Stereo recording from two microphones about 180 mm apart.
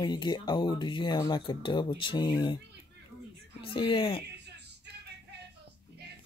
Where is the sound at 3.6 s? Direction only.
30° left (ahead or behind).